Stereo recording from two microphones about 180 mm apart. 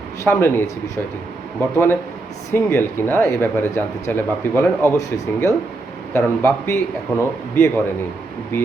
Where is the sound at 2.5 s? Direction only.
10° left (ahead or behind).